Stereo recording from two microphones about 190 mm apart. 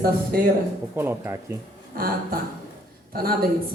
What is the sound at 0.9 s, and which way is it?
Speech, 15° right (ahead or behind).